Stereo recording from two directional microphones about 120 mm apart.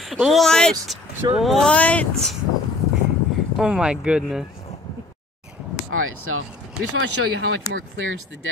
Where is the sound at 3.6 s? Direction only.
5° right (ahead or behind).